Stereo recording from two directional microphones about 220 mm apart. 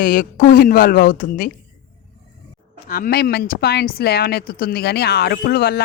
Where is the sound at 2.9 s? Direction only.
45° left (ahead or behind).